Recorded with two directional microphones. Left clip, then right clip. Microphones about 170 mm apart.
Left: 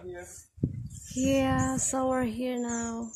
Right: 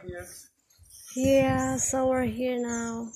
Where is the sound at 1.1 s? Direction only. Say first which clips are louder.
Right 4 dB; 15° left (ahead or behind).